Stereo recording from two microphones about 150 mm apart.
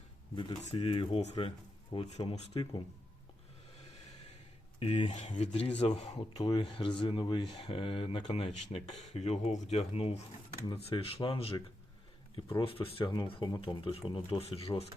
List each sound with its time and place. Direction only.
0.6 s speech: 45° left (ahead or behind)
2.5 s speech: 35° left (ahead or behind)
4.8 s speech: 50° left (ahead or behind)
6.3 s speech: 30° left (ahead or behind)